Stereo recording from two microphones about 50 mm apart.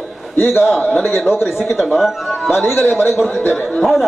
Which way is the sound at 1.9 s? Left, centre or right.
Centre.